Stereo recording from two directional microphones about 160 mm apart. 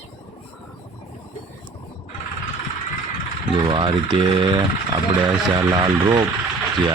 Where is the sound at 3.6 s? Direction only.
30° right (ahead or behind).